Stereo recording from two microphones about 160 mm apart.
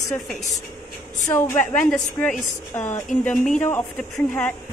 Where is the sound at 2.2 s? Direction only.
10° left (ahead or behind).